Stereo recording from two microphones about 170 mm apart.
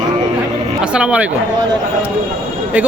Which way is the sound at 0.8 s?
5° right (ahead or behind).